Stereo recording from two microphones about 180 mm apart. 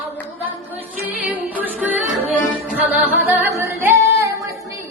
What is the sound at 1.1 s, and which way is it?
Music, 10° right (ahead or behind).